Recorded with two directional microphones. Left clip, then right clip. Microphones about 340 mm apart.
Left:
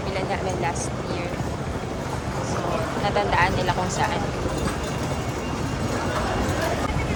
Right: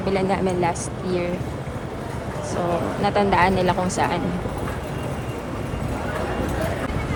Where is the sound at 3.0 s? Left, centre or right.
Centre.